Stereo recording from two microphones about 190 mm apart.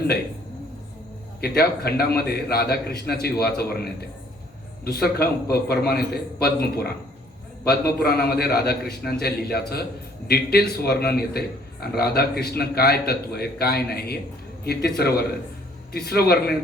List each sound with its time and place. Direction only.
1.4 s a man's voice: 55° left (ahead or behind)
4.9 s a man's voice: 55° left (ahead or behind)